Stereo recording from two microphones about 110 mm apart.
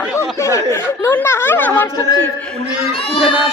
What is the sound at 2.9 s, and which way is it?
Speech, 55° left (ahead or behind).